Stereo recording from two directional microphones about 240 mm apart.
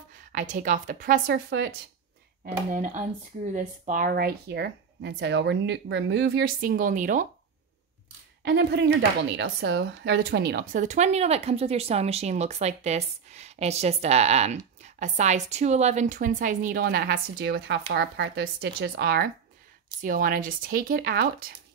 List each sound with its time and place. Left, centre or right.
0.3 s speech: right
1.2 s a woman's voice: right
2.4 s speech: right
8.5 s speech: right